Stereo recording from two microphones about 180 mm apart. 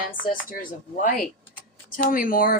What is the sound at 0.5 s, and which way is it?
Speech, 45° left (ahead or behind).